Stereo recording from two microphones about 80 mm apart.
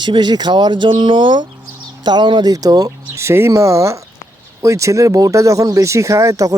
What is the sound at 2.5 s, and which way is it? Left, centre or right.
Speech, right.